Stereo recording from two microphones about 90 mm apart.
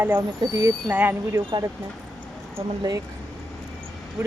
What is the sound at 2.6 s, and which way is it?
Speech, 70° right (ahead or behind).